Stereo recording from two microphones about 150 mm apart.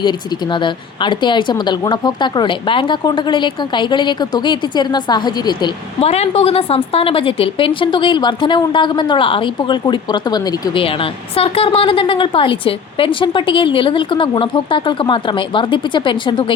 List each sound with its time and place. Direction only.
0.5 s speech: 30° left (ahead or behind)
6.0 s speech: 45° left (ahead or behind)